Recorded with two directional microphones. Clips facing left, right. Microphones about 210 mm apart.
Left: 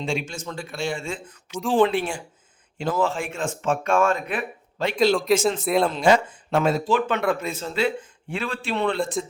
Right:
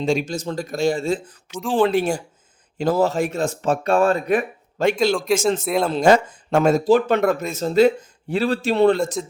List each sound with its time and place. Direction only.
0.0 s speech: 40° right (ahead or behind)
1.5 s a man's voice: centre (ahead or behind)
2.0 s speech: 40° right (ahead or behind)
4.9 s a man's voice: centre (ahead or behind)
5.9 s speech: 45° right (ahead or behind)